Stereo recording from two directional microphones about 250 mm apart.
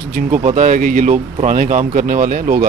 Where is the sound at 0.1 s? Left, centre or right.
Right.